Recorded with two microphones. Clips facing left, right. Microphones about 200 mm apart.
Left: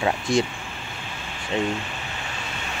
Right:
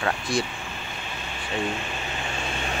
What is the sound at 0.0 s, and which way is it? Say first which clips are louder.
Speech: left 4 dB; 25° left (ahead or behind).